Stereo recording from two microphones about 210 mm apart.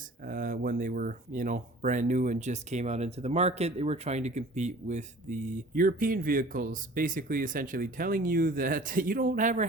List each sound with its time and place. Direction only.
0.3 s speech: 40° right (ahead or behind)